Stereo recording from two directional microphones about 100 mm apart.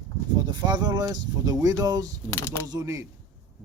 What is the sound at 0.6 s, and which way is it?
Speech, 45° right (ahead or behind).